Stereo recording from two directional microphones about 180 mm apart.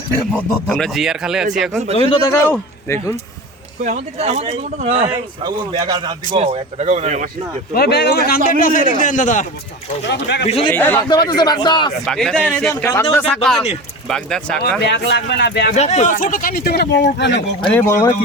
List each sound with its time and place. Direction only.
0.3 s speech: 5° left (ahead or behind)
2.0 s a man's voice: 30° left (ahead or behind)
2.3 s a man's voice: 15° left (ahead or behind)
3.8 s speech: 35° right (ahead or behind)
7.7 s speech: 60° left (ahead or behind)
8.4 s speech: 50° left (ahead or behind)
10.1 s speech: 70° left (ahead or behind)
10.4 s a man's voice: 35° left (ahead or behind)
10.7 s a man's voice: 10° left (ahead or behind)
11.1 s a man's voice: 25° left (ahead or behind)
12.0 s a man's voice: centre (ahead or behind)
14.8 s speech: 80° left
15.7 s speech: 40° left (ahead or behind); by 17.4 s 75° left (ahead or behind)
17.6 s a man's voice: 10° left (ahead or behind)